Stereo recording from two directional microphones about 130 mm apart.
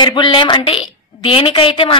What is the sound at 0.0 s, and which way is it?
A woman's voice, 35° left (ahead or behind).